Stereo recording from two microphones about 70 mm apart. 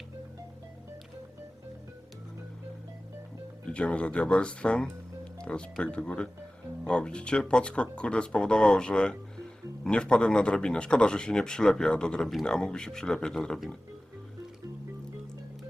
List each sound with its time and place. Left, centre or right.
3.7 s a man's voice: centre